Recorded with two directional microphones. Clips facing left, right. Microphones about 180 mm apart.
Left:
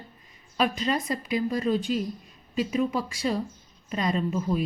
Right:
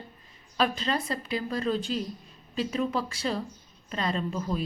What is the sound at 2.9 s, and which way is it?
A woman's voice, 15° left (ahead or behind).